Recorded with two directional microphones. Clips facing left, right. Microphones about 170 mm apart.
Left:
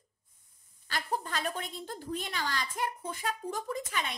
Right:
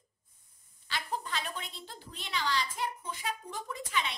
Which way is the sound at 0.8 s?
45° left (ahead or behind).